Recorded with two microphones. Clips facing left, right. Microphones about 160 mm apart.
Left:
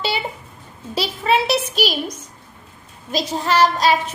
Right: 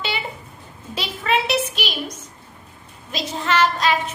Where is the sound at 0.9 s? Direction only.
35° left (ahead or behind).